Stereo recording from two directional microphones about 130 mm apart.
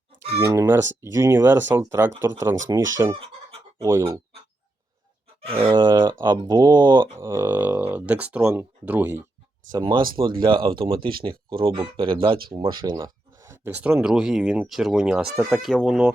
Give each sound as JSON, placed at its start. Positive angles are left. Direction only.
{"t": 0.3, "sound": "speech", "side_deg": -20}
{"t": 5.5, "sound": "speech", "side_deg": -45}
{"t": 7.2, "sound": "speech", "side_deg": -20}
{"t": 10.2, "sound": "speech", "side_deg": -40}